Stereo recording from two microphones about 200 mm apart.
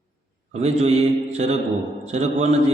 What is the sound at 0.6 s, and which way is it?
A man's voice, 35° right (ahead or behind).